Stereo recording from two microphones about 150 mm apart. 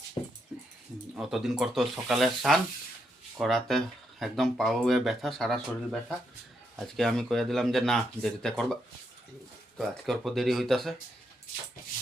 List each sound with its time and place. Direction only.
0.5 s dog: 5° right (ahead or behind)
1.1 s speech: centre (ahead or behind)